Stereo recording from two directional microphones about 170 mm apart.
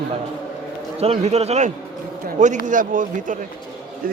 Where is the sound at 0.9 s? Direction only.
35° right (ahead or behind).